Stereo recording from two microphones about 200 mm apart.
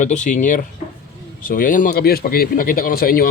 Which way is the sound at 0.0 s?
35° left (ahead or behind).